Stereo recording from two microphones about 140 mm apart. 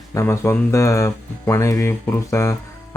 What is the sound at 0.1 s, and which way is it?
Speech, 20° left (ahead or behind).